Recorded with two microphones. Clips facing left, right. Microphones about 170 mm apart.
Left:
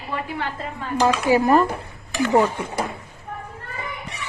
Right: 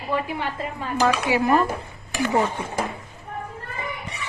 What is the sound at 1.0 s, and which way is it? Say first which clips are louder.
Speech: left 3 dB; 35° left (ahead or behind).